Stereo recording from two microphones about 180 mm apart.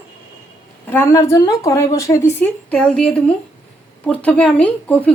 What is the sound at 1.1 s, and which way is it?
Speech, 20° left (ahead or behind).